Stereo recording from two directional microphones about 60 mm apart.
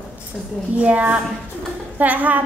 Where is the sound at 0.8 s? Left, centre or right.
Right.